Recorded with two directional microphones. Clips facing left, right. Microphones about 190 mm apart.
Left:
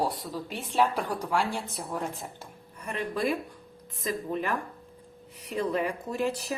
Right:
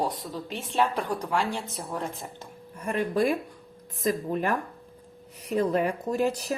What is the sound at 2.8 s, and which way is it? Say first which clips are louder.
A woman's voice: right 5 dB; 45° right (ahead or behind).